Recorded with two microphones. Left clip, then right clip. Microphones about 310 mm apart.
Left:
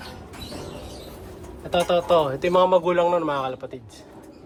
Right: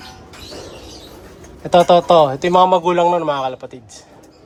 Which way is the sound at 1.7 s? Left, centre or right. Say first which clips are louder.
Right 9 dB; centre.